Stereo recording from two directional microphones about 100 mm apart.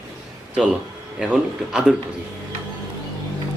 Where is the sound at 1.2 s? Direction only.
10° right (ahead or behind).